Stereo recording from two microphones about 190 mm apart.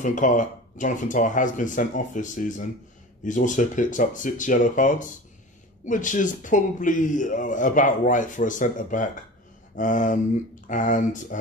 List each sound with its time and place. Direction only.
0.0 s a man's voice: 45° left (ahead or behind)